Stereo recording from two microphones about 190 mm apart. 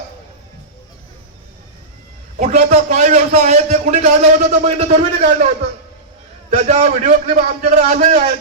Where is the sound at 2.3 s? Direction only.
35° right (ahead or behind).